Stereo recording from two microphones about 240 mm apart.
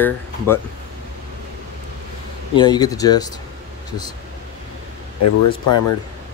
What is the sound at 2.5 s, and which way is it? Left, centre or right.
Speech, centre.